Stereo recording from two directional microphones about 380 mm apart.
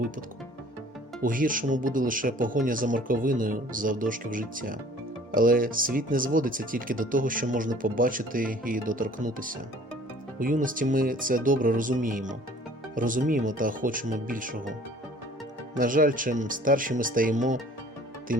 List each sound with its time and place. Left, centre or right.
1.2 s speech: right
15.7 s speech: right